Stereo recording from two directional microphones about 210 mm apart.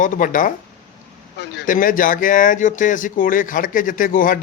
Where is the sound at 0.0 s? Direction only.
40° left (ahead or behind).